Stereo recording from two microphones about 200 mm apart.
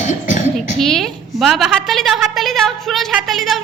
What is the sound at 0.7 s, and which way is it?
Speech, centre (ahead or behind).